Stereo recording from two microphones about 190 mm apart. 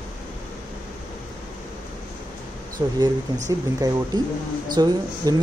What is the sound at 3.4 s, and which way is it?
Speech, 20° right (ahead or behind).